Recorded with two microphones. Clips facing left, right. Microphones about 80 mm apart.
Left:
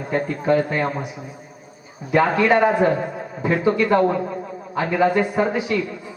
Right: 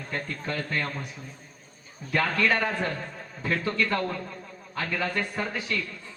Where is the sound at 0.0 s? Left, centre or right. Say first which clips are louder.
Left 11 dB; centre.